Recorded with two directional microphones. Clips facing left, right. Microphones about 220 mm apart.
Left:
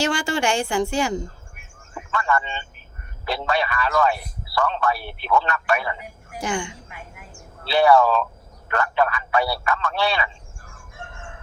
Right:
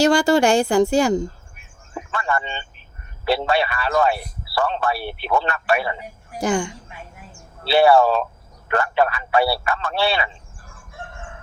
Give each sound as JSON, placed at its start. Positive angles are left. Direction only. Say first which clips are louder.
{"t": 0.0, "sound": "a man's voice", "louder": "right 7 dB", "side_deg": -40}